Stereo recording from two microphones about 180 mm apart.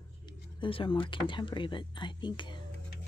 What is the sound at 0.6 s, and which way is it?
Speech, 30° left (ahead or behind).